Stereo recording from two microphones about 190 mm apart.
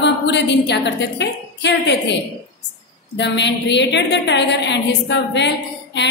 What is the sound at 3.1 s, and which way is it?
A woman's voice, 70° left (ahead or behind).